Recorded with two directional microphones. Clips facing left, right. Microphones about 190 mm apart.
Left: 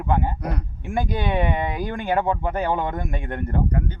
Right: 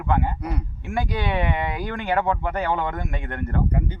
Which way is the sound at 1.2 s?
20° left (ahead or behind).